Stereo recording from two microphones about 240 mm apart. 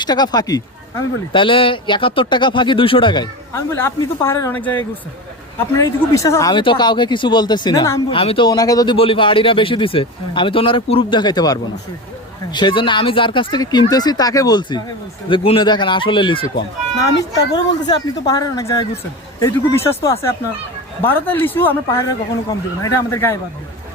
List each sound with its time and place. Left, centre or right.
0.0 s speech: centre